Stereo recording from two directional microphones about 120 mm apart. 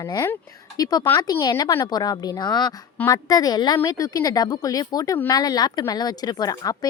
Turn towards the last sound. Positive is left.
turn(degrees=30)  # may be behind; listen again after turning